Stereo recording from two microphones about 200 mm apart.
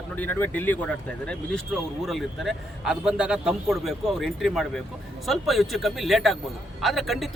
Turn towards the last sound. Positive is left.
turn(degrees=0)  # may be behind; listen again after turning